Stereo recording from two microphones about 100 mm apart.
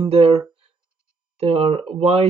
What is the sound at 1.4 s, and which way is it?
Speech, 80° right.